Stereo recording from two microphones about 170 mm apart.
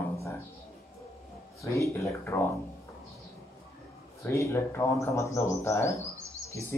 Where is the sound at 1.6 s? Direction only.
15° left (ahead or behind).